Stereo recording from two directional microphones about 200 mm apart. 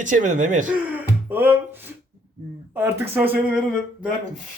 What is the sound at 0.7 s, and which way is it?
Speech, 10° right (ahead or behind).